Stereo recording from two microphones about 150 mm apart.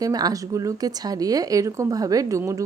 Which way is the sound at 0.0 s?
25° right (ahead or behind).